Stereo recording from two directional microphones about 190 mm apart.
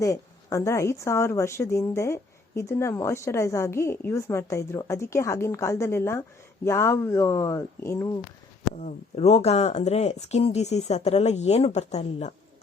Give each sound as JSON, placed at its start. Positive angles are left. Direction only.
{"t": 0.0, "sound": "a woman's voice", "side_deg": 15}
{"t": 8.7, "sound": "speech", "side_deg": 35}